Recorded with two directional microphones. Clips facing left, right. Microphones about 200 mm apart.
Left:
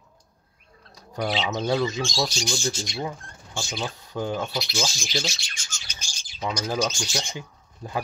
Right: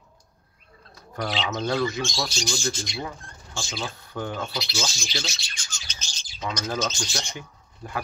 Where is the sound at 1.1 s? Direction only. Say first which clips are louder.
Left 2 dB; 10° left (ahead or behind).